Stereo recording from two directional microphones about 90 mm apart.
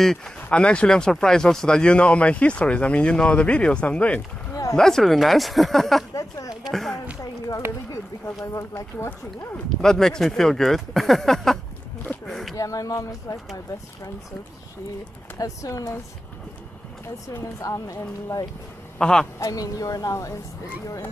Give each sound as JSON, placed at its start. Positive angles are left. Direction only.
{"t": 0.0, "sound": "speech", "side_deg": 5}
{"t": 4.5, "sound": "a sound", "side_deg": 40}
{"t": 4.7, "sound": "speech", "side_deg": 5}
{"t": 6.1, "sound": "a sound", "side_deg": 40}
{"t": 6.6, "sound": "speech", "side_deg": 5}
{"t": 7.2, "sound": "a sound", "side_deg": 40}
{"t": 7.9, "sound": "speech", "side_deg": 35}
{"t": 9.8, "sound": "speech", "side_deg": 5}
{"t": 12.3, "sound": "a sound", "side_deg": 0}
{"t": 12.5, "sound": "speech", "side_deg": 40}
{"t": 15.3, "sound": "speech", "side_deg": 40}
{"t": 17.4, "sound": "speech", "side_deg": 35}
{"t": 18.9, "sound": "a man's voice", "side_deg": 10}
{"t": 19.4, "sound": "speech", "side_deg": 40}